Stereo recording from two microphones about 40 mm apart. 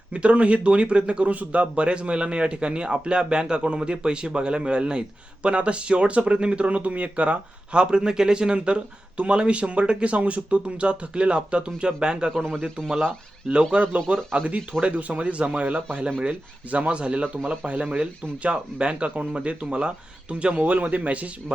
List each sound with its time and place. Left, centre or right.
0.1 s speech: right
12.3 s a man's voice: centre
13.5 s speech: right
14.1 s speech: right
20.6 s speech: right